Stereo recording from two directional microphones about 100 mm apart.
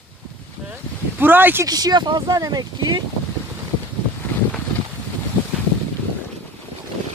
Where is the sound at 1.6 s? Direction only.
40° right (ahead or behind).